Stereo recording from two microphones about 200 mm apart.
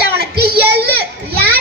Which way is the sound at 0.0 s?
50° right (ahead or behind).